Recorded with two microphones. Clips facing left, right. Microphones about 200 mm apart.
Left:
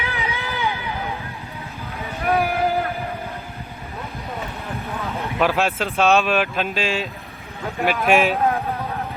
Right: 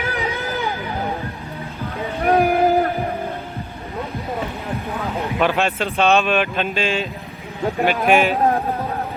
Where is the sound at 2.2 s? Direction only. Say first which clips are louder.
Right 4 dB; 45° right (ahead or behind).